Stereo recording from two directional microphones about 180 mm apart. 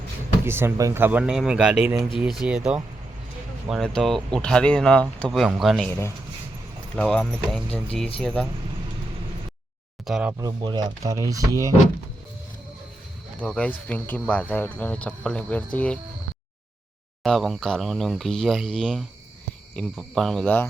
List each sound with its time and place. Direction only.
0.4 s speech: 15° right (ahead or behind)
6.9 s speech: 5° left (ahead or behind)
10.1 s speech: 5° right (ahead or behind)
10.3 s speech: 20° right (ahead or behind)
13.4 s speech: 5° left (ahead or behind)
17.2 s speech: centre (ahead or behind)